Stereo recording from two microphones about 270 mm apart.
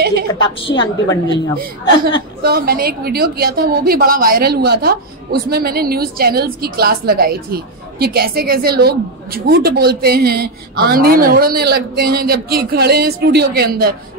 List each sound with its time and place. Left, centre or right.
0.0 s a sound: right
0.3 s a woman's voice: centre
2.4 s a woman's voice: right